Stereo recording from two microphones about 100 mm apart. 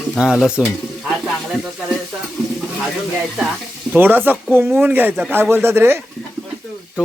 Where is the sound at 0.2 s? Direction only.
10° right (ahead or behind).